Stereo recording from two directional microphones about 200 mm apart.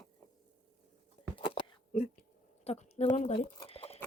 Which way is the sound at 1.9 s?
45° left (ahead or behind).